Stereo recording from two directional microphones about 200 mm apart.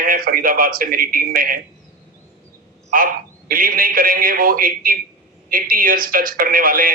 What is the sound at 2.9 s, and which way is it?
A man's voice, 45° right (ahead or behind).